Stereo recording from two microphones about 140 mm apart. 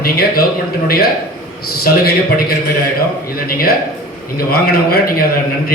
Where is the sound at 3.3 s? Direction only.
90° left.